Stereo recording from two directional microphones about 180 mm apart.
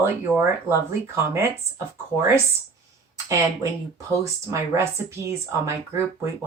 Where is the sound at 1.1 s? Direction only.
15° right (ahead or behind).